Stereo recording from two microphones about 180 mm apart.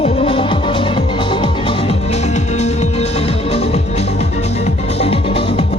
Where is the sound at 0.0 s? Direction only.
30° left (ahead or behind).